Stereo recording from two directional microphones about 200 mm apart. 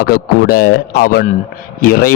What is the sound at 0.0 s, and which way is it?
Speech, 45° left (ahead or behind).